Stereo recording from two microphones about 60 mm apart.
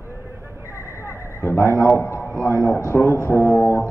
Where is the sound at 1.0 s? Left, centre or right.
Left.